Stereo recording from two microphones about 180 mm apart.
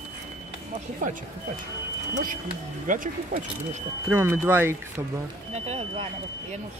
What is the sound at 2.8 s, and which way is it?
Speech, 50° right (ahead or behind).